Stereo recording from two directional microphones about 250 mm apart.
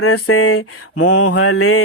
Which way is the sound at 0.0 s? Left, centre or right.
Left.